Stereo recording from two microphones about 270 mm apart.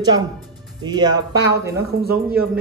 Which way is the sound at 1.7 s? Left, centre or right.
Right.